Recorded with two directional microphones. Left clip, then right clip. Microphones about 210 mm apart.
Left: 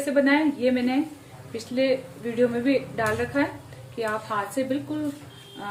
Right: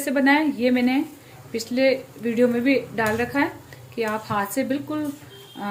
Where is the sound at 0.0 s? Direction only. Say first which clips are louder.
Right 2 dB; 35° right (ahead or behind).